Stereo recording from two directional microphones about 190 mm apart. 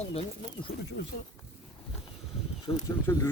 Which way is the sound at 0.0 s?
30° left (ahead or behind).